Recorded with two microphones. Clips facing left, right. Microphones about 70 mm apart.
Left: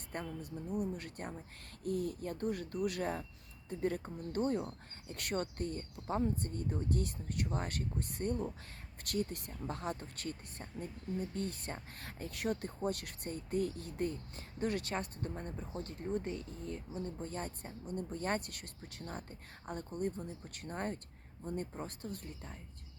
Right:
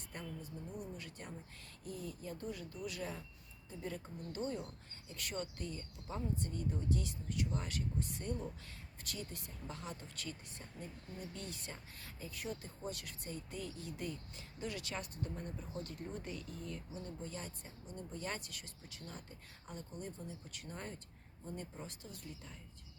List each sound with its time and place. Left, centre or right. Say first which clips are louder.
0.1 s speech: left 6 dB; left